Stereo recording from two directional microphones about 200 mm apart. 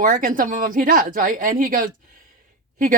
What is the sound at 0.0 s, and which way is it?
Speech, 40° right (ahead or behind).